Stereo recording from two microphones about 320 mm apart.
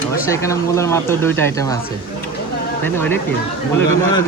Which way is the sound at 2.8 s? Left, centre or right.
Centre.